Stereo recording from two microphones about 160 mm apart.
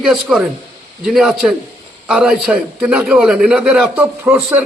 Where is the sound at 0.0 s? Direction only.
5° right (ahead or behind).